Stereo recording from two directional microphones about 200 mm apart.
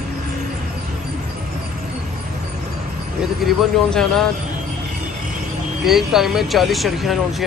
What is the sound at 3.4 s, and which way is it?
Speech, 5° left (ahead or behind).